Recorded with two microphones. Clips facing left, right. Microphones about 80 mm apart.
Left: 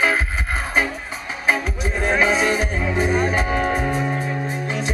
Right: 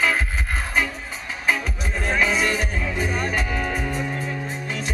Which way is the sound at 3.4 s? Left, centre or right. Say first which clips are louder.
Left 5 dB; left.